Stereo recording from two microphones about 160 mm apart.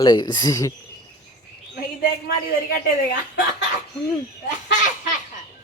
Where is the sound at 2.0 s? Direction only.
75° left (ahead or behind).